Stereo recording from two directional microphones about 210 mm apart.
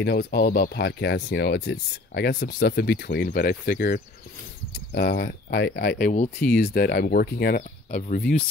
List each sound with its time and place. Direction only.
0.0 s speech: 50° left (ahead or behind)